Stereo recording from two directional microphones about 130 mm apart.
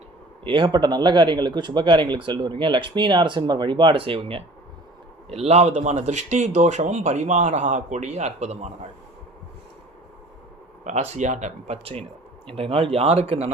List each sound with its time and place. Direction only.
0.4 s speech: 40° right (ahead or behind); by 8.9 s 60° right (ahead or behind)
10.8 s speech: 60° right (ahead or behind)